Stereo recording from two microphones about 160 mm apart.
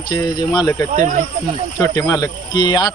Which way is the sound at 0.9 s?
50° right (ahead or behind).